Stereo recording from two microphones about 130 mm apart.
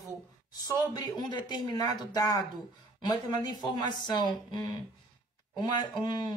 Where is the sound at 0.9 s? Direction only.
30° left (ahead or behind).